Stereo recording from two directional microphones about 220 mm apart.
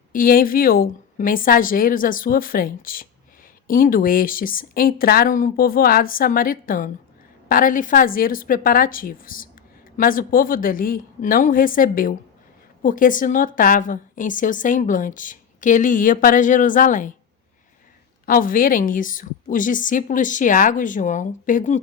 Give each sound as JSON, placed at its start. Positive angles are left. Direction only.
{"t": 0.1, "sound": "a woman's voice", "side_deg": 40}
{"t": 18.3, "sound": "a woman's voice", "side_deg": 40}